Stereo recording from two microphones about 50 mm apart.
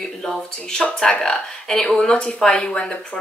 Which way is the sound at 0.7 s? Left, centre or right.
Centre.